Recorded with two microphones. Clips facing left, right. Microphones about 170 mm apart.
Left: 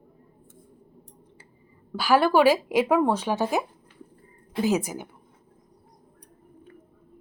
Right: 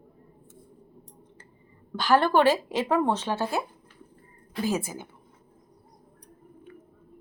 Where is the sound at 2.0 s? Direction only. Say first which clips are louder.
Left 2 dB; 10° left (ahead or behind).